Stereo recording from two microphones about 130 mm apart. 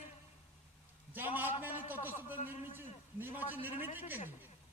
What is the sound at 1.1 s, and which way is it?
A man's voice, 15° right (ahead or behind).